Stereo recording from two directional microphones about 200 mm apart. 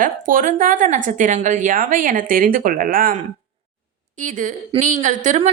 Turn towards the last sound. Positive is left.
turn(degrees=-35)  # may be behind; listen again after turning